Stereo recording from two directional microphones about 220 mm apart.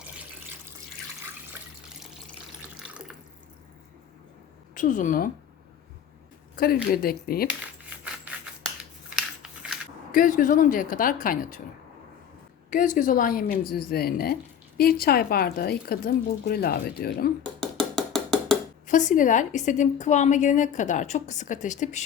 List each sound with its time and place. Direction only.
2.6 s water tap: 5° right (ahead or behind)
4.7 s a woman's voice: 35° left (ahead or behind)
6.6 s speech: 45° left (ahead or behind)
7.4 s a sound: 5° right (ahead or behind)
9.0 s scissors: centre (ahead or behind)
10.1 s a woman's voice: 40° left (ahead or behind)
12.7 s a woman's voice: 35° left (ahead or behind)
17.4 s wood block: centre (ahead or behind)
18.9 s a woman's voice: 35° left (ahead or behind)